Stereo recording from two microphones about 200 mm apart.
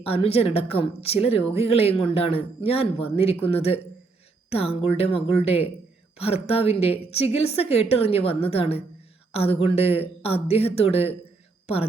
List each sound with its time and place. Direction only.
0.0 s a woman's voice: 30° left (ahead or behind)